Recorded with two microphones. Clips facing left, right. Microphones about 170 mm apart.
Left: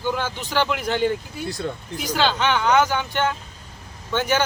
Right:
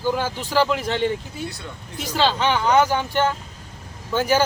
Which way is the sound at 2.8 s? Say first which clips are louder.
Right 2 dB; 35° right (ahead or behind).